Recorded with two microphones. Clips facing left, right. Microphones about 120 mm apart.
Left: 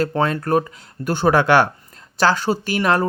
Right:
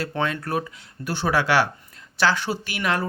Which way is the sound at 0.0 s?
40° left (ahead or behind).